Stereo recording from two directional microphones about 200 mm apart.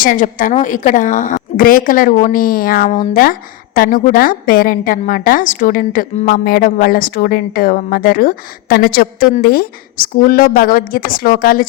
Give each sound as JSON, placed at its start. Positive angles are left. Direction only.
{"t": 0.0, "sound": "a woman's voice", "side_deg": 45}